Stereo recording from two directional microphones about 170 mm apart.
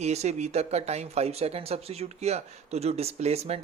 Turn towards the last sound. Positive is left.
turn(degrees=-40)  # may be behind; listen again after turning